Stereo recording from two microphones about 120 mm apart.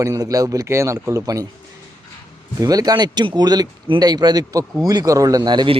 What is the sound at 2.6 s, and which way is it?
Speech, 30° right (ahead or behind).